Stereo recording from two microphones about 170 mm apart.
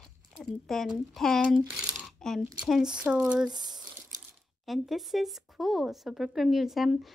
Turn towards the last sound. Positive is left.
turn(degrees=0)  # may be behind; listen again after turning